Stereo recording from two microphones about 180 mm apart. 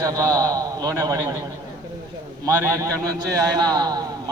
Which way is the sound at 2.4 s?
20° right (ahead or behind).